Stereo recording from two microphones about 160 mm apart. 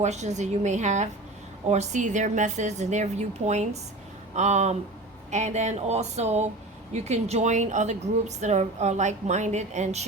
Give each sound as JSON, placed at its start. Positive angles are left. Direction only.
{"t": 0.0, "sound": "a woman's voice", "side_deg": -45}